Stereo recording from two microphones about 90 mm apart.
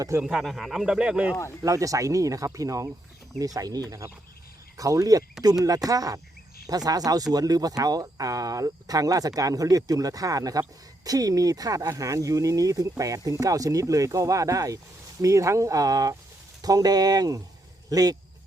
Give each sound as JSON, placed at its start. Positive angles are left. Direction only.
{"t": 0.3, "sound": "speech", "side_deg": 0}
{"t": 1.6, "sound": "speech", "side_deg": -40}